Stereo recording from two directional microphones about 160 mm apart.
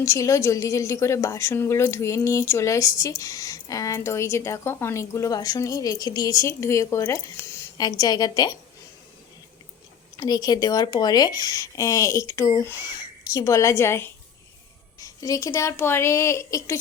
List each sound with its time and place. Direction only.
0.0 s a woman's voice: 20° left (ahead or behind)
10.2 s a woman's voice: 25° left (ahead or behind)